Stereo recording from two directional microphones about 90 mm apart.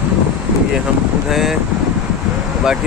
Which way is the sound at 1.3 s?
Centre (ahead or behind).